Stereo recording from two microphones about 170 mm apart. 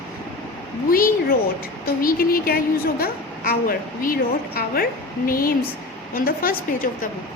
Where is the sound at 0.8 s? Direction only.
60° left (ahead or behind).